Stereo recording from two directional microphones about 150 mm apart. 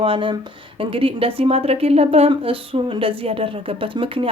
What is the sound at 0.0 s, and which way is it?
A woman's voice, 35° right (ahead or behind).